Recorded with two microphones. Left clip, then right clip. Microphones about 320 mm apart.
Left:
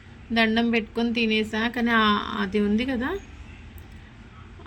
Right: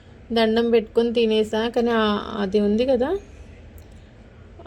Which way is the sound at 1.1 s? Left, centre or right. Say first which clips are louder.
Right 5 dB; centre.